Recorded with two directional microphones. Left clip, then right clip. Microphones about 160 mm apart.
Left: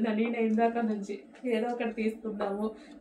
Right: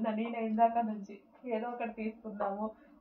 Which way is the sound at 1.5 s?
25° left (ahead or behind).